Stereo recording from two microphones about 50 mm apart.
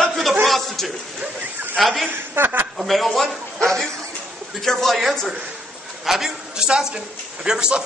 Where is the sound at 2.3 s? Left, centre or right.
Right.